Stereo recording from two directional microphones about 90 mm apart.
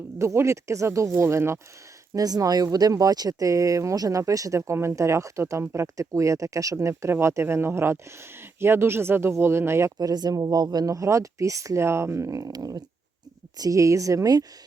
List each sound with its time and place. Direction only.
0.2 s speech: 30° right (ahead or behind)
2.1 s speech: 45° right (ahead or behind)
10.0 s speech: 45° right (ahead or behind)